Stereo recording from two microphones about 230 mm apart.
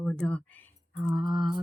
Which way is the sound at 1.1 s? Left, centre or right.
Centre.